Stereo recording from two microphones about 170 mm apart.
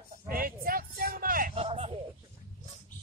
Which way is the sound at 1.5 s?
35° right (ahead or behind).